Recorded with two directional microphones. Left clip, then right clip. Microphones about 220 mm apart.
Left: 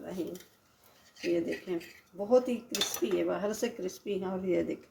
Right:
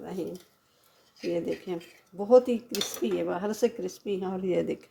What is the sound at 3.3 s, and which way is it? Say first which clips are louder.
Speech: right 4 dB; 35° right (ahead or behind).